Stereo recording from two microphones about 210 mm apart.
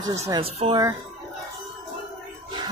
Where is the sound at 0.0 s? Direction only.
15° right (ahead or behind).